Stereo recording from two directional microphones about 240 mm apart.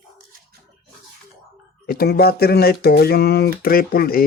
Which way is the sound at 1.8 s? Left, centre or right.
Left.